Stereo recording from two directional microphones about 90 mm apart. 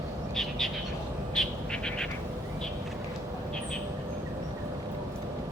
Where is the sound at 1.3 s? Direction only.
5° left (ahead or behind).